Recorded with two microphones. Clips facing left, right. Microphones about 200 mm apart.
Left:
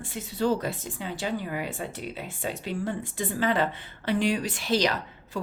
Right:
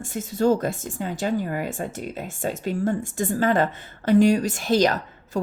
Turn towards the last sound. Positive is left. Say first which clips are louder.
# right 6 dB
turn(degrees=-45)  # may be behind; listen again after turning